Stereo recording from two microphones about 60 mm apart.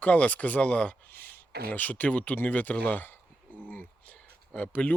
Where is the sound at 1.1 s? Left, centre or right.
Left.